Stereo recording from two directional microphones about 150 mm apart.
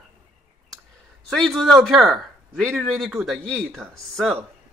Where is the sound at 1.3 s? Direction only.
Centre (ahead or behind).